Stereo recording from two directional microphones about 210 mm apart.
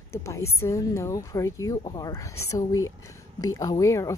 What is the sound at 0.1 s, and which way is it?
Speech, 10° left (ahead or behind).